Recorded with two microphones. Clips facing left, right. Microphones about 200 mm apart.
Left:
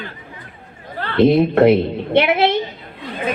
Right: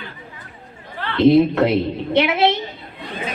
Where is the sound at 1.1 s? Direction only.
60° left (ahead or behind).